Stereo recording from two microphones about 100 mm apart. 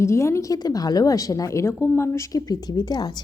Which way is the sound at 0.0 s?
30° left (ahead or behind).